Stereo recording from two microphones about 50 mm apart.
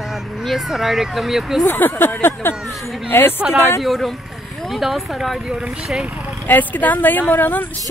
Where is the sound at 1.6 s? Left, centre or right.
Left.